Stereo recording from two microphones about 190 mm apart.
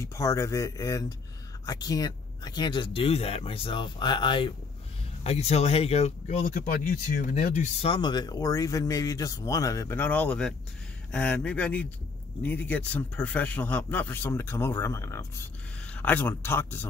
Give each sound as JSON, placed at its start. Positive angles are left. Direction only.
{"t": 0.0, "sound": "speech", "side_deg": 15}
{"t": 7.9, "sound": "speech", "side_deg": 25}